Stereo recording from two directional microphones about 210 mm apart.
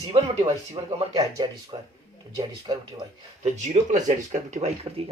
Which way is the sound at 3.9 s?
35° right (ahead or behind).